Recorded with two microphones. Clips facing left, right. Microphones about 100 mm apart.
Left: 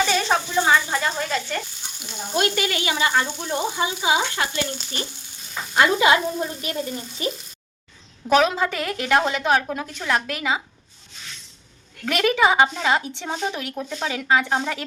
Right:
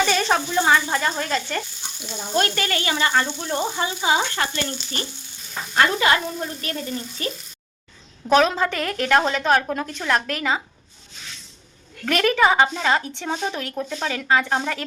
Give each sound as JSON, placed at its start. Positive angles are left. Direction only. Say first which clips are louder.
{"t": 0.1, "sound": "a sound", "louder": "right 1 dB", "side_deg": 0}
{"t": 0.9, "sound": "speech", "louder": "right 1 dB", "side_deg": 5}
{"t": 2.3, "sound": "frying", "louder": "even", "side_deg": 10}
{"t": 8.3, "sound": "frying", "louder": "right 1 dB", "side_deg": 10}
{"t": 12.0, "sound": "frying", "louder": "right 1 dB", "side_deg": 10}